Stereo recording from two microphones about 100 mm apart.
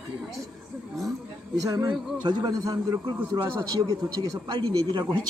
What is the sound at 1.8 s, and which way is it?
A man's voice, 50° right (ahead or behind).